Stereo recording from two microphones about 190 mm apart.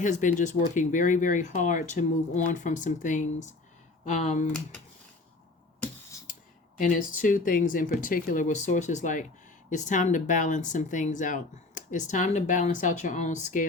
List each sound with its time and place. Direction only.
0.0 s speech: 40° left (ahead or behind)
6.7 s speech: 45° left (ahead or behind)